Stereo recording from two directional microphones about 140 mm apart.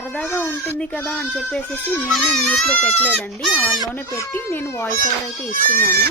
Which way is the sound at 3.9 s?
15° left (ahead or behind).